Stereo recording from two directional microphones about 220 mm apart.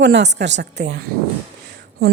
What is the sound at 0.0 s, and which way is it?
A woman's voice, 50° right (ahead or behind).